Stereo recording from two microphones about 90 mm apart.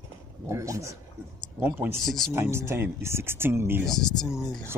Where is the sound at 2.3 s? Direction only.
30° right (ahead or behind).